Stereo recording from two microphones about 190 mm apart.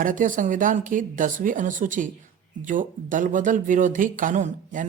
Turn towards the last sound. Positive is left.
turn(degrees=-40)  # may be behind; listen again after turning